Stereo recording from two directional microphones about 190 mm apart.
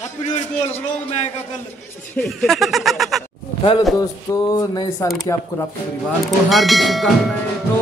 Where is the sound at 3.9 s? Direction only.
15° left (ahead or behind).